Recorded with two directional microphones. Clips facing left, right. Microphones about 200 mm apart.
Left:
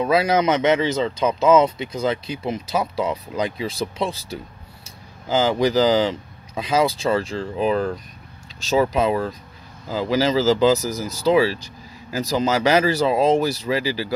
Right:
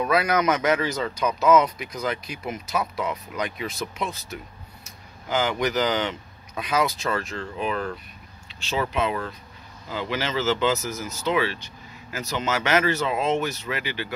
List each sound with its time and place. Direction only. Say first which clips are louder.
0.0 s speech: left 4 dB; 25° left (ahead or behind)